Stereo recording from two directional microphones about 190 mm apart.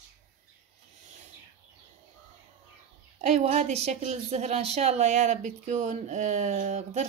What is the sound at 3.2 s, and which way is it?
A woman's voice, 35° right (ahead or behind).